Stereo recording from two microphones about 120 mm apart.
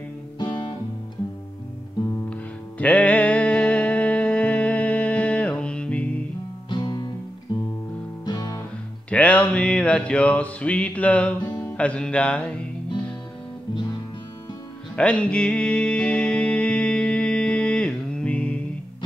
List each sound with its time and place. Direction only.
0.4 s music: 40° left (ahead or behind)
2.8 s music: 10° left (ahead or behind)
6.7 s music: 40° left (ahead or behind)
8.3 s music: 35° left (ahead or behind)
9.1 s a sound: 10° left (ahead or behind)
11.4 s music: 25° left (ahead or behind)
11.7 s music: 10° left (ahead or behind)
15.0 s music: 10° left (ahead or behind)